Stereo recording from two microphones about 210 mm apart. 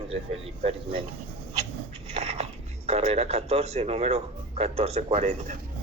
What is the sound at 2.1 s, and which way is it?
Biting, 30° right (ahead or behind).